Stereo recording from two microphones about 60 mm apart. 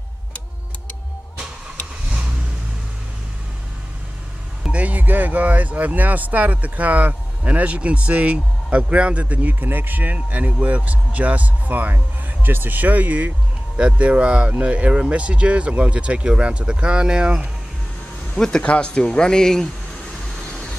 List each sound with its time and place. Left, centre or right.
4.7 s speech: right
18.3 s speech: centre